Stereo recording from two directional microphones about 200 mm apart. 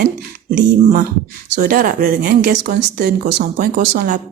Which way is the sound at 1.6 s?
45° right (ahead or behind).